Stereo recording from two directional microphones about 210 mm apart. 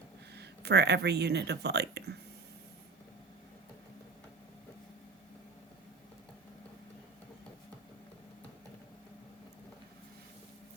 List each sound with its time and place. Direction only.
0.3 s speech: 50° right (ahead or behind)